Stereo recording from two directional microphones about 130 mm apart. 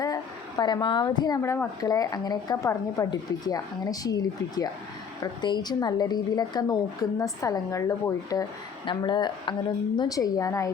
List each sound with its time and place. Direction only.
0.0 s a sound: 30° left (ahead or behind)
1.8 s a woman's voice: 25° left (ahead or behind)
8.9 s a woman's voice: 35° left (ahead or behind)